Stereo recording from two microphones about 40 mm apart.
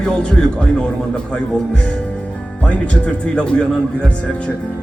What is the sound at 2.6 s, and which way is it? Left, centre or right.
Speech, left.